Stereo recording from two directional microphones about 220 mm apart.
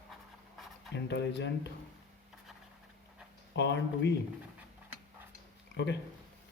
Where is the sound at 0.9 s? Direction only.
50° left (ahead or behind).